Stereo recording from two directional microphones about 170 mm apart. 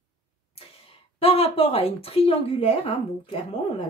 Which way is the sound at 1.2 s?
35° left (ahead or behind).